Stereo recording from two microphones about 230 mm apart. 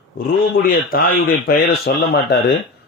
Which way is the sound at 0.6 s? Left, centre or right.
Left.